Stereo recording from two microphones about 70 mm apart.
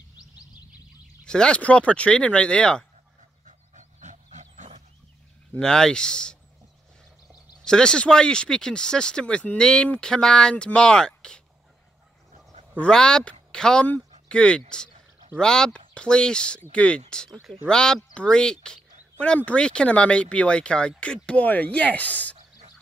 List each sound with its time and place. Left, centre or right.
1.2 s speech: centre
5.6 s speech: centre
7.6 s speech: centre
12.7 s speech: centre